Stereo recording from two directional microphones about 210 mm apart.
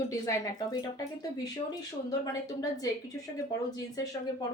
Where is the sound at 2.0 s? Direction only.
15° left (ahead or behind).